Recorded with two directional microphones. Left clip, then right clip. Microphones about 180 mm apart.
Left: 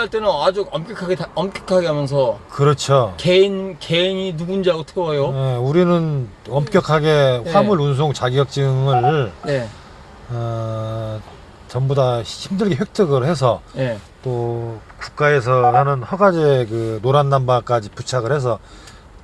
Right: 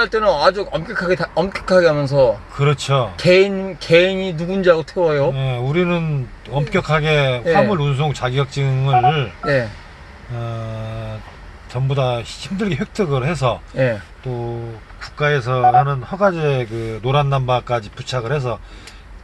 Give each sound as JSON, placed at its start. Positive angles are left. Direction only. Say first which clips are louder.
{"t": 0.0, "sound": "speech", "louder": "right 3 dB", "side_deg": -30}
{"t": 2.6, "sound": "speech", "louder": "left 8 dB", "side_deg": 50}
{"t": 3.2, "sound": "speech", "louder": "right 1 dB", "side_deg": -30}
{"t": 5.4, "sound": "speech", "louder": "left 3 dB", "side_deg": 50}
{"t": 9.4, "sound": "speech", "louder": "right 4 dB", "side_deg": -25}
{"t": 10.4, "sound": "speech", "louder": "left 4 dB", "side_deg": 50}
{"t": 15.0, "sound": "speech", "louder": "left 3 dB", "side_deg": 50}